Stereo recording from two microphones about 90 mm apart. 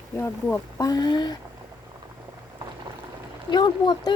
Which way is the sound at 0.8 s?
45° left (ahead or behind).